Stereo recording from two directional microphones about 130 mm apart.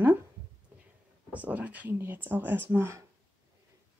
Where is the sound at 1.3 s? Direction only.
10° right (ahead or behind).